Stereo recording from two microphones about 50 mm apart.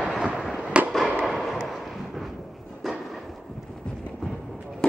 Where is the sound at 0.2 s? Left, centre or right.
Centre.